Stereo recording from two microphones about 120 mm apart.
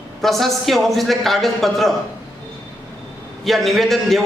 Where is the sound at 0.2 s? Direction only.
Centre (ahead or behind).